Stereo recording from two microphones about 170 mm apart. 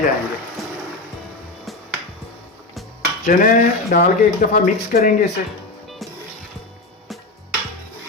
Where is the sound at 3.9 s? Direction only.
50° left (ahead or behind).